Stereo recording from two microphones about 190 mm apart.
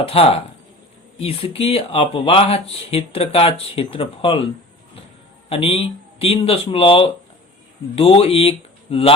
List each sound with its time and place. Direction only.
0.0 s speech: 30° left (ahead or behind)
5.5 s speech: 30° left (ahead or behind)